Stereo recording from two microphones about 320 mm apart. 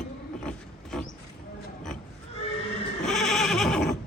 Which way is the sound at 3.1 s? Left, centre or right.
Centre.